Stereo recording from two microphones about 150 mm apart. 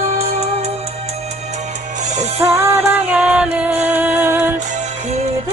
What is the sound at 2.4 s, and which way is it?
Music, 20° right (ahead or behind).